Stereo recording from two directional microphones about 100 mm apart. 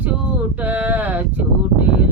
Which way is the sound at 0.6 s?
15° right (ahead or behind).